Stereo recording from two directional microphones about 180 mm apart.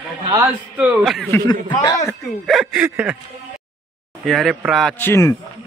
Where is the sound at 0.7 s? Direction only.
5° right (ahead or behind).